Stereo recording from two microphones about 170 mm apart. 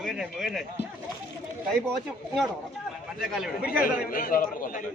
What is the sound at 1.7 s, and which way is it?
A man's voice, centre (ahead or behind).